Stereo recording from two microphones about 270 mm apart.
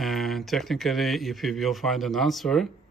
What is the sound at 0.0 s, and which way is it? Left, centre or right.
Speech, centre.